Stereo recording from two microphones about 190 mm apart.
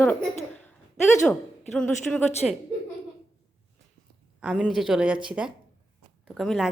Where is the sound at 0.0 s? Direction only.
10° left (ahead or behind).